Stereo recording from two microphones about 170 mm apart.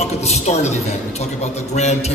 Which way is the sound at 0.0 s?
40° left (ahead or behind).